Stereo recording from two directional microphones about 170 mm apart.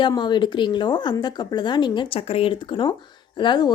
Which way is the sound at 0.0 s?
25° left (ahead or behind).